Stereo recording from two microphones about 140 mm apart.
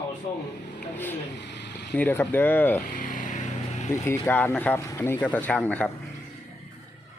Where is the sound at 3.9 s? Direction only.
20° left (ahead or behind).